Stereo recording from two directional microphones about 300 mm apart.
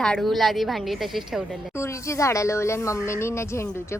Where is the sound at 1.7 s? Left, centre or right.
Centre.